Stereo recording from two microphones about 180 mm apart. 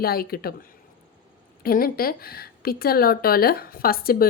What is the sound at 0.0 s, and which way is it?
Speech, 55° left (ahead or behind).